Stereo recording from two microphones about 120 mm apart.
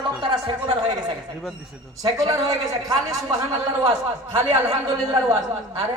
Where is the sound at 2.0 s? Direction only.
30° right (ahead or behind).